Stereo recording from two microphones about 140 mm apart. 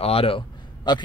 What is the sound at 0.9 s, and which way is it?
Speech, 30° left (ahead or behind).